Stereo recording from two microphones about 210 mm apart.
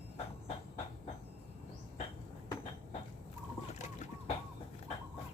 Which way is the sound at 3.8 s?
35° left (ahead or behind).